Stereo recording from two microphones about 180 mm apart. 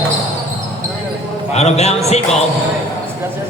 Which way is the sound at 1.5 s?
35° left (ahead or behind).